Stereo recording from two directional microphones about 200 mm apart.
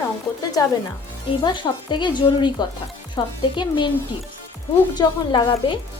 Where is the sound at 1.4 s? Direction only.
25° left (ahead or behind).